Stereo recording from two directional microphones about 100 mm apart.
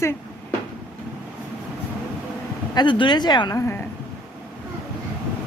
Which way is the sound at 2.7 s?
50° left (ahead or behind).